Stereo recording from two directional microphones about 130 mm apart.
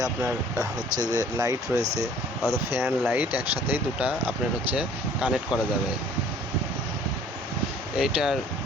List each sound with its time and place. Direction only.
1.1 s speech: 25° right (ahead or behind); by 5.5 s 5° right (ahead or behind)
7.9 s speech: 5° right (ahead or behind)